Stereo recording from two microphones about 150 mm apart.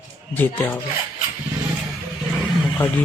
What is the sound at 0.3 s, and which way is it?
Speech, 10° left (ahead or behind).